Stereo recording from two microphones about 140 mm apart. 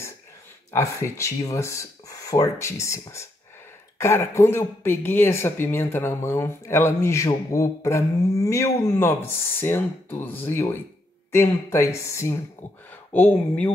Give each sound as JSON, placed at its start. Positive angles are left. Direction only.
{"t": 0.7, "sound": "speech", "side_deg": 20}